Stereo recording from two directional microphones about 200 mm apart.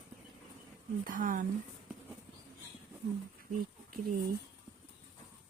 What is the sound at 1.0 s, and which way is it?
Speech, 40° right (ahead or behind).